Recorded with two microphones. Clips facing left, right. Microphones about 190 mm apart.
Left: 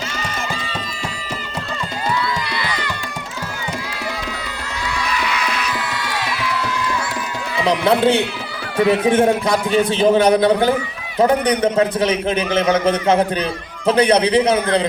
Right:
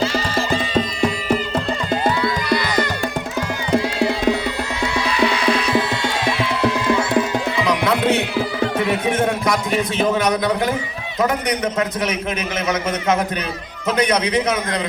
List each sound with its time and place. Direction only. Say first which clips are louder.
0.0 s music: right 7 dB; 30° right (ahead or behind)
2.5 s music: right 6 dB; 45° right (ahead or behind)
4.9 s music: right 4 dB; 30° right (ahead or behind)
7.6 s a sound: left 5 dB; 30° left (ahead or behind)
8.9 s a man's voice: left 5 dB; 30° left (ahead or behind)